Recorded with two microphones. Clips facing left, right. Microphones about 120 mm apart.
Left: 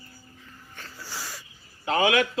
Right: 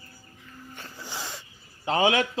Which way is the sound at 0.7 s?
20° right (ahead or behind).